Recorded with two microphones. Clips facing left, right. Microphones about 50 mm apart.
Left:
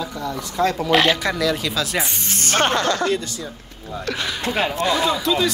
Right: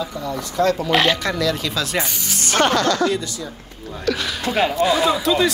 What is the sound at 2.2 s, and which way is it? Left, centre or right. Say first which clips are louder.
Music: right 2 dB; left.